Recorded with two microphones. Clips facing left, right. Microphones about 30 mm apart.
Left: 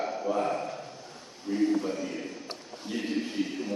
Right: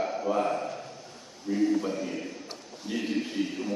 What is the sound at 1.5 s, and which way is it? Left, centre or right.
Speech, left.